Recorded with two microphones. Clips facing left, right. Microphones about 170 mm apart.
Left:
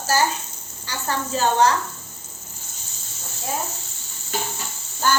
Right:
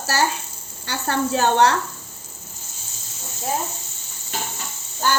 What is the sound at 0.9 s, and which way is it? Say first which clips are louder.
Speech: right 4 dB; 65° right (ahead or behind).